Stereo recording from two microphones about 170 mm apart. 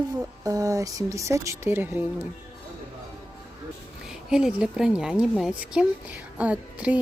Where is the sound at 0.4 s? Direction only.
20° right (ahead or behind).